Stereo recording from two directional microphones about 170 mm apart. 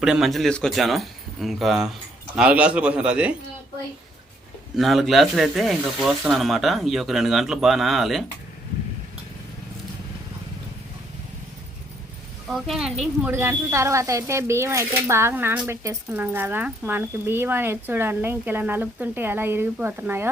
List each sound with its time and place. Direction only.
0.0 s speech: 5° right (ahead or behind)
4.8 s speech: centre (ahead or behind)
12.5 s speech: centre (ahead or behind)